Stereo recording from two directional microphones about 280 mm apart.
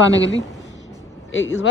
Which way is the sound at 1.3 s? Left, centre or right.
Left.